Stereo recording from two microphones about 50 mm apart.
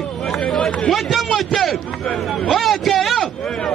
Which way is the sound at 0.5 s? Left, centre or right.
Centre.